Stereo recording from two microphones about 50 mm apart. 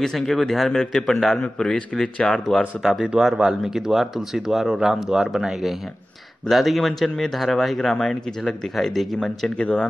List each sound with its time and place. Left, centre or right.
0.0 s speech: centre
2.8 s speech: centre
9.6 s speech: centre